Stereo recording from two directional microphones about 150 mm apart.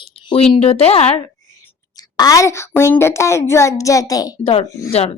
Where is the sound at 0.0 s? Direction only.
35° left (ahead or behind).